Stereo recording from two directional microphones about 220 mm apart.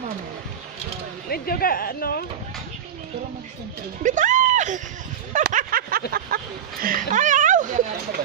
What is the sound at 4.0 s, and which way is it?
Speech, 35° right (ahead or behind).